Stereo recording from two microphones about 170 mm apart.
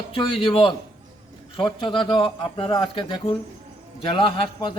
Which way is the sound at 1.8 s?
30° left (ahead or behind).